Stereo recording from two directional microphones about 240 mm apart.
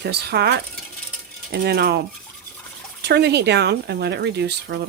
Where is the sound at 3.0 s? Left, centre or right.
Right.